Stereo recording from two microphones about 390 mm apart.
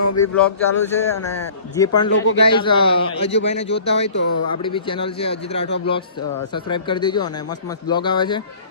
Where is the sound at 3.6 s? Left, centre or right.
Left.